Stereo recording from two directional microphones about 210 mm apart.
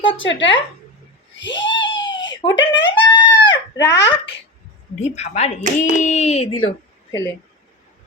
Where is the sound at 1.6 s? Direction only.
60° left (ahead or behind).